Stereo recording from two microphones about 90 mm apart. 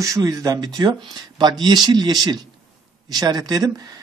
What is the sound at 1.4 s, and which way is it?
A man's voice, 55° right (ahead or behind).